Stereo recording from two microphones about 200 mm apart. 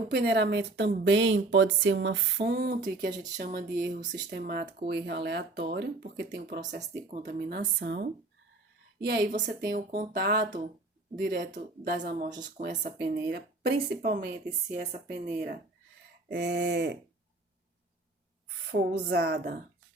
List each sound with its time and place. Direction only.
0.1 s speech: 55° right (ahead or behind)
6.7 s speech: 40° right (ahead or behind)
16.3 s speech: 60° right (ahead or behind)
18.7 s speech: 60° right (ahead or behind)